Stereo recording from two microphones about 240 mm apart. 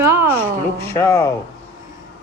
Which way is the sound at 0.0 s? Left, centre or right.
Centre.